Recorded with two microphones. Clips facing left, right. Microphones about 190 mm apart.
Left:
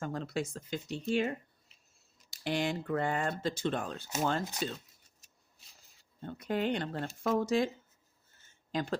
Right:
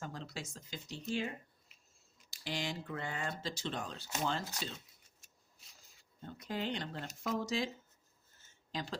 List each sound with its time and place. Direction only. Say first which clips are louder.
0.0 s speech: left 9 dB; 55° left (ahead or behind)
2.3 s speech: left 8 dB; 55° left (ahead or behind)
6.2 s speech: left 7 dB; 60° left (ahead or behind)
8.7 s speech: left 8 dB; 55° left (ahead or behind)